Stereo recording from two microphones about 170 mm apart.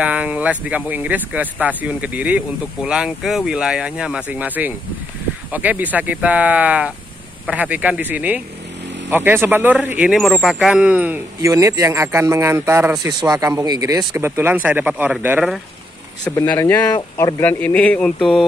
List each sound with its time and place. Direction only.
0.0 s speech: 5° right (ahead or behind)
11.4 s speech: 20° right (ahead or behind)
16.3 s speech: 10° left (ahead or behind)
17.4 s speech: 10° left (ahead or behind)